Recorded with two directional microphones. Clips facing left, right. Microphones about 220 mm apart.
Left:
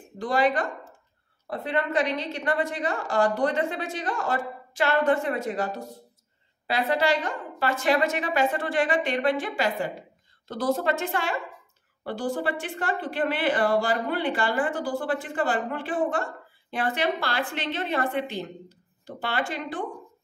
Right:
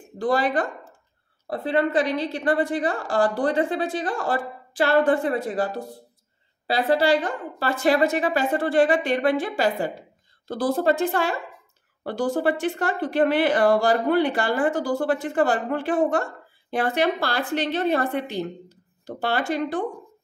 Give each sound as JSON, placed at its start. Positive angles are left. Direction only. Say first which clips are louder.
{"t": 0.2, "sound": "a woman's voice", "louder": "right 2 dB", "side_deg": -35}